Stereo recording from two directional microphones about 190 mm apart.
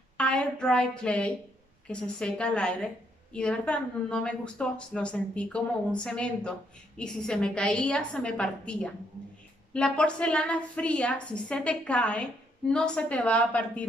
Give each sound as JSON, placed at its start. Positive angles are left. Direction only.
{"t": 0.2, "sound": "a woman's voice", "side_deg": 5}
{"t": 9.8, "sound": "a woman's voice", "side_deg": 5}